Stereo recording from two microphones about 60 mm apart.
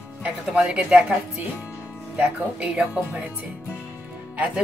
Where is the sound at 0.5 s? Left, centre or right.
Centre.